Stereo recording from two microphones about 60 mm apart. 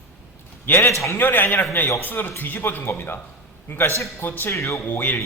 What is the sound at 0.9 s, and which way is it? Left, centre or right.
Speech, left.